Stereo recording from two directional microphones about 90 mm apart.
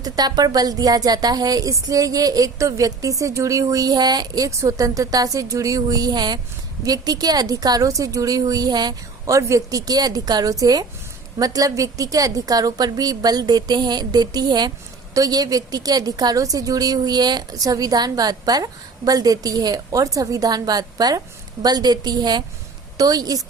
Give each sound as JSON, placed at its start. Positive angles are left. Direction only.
{"t": 0.0, "sound": "a woman's voice", "side_deg": -45}
{"t": 9.3, "sound": "a woman's voice", "side_deg": -35}